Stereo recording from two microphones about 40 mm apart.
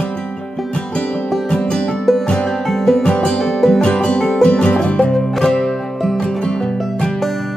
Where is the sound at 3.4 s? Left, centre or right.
Centre.